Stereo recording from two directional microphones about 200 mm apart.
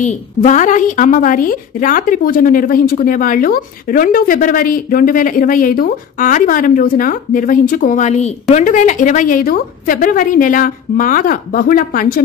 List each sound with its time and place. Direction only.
0.0 s a woman's voice: 40° left (ahead or behind)